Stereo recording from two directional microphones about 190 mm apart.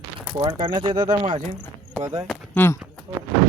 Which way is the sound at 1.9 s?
15° right (ahead or behind).